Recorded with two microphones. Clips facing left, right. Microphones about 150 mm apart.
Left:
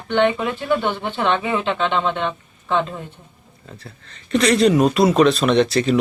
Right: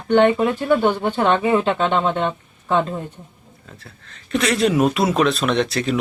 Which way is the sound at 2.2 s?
45° right (ahead or behind).